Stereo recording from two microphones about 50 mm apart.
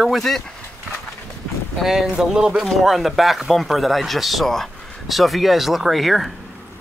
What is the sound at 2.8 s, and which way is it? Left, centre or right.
Speech, centre.